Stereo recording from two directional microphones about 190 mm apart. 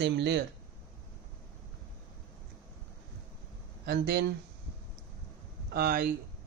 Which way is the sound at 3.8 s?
60° right (ahead or behind).